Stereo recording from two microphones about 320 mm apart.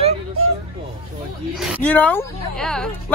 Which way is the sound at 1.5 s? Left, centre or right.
Centre.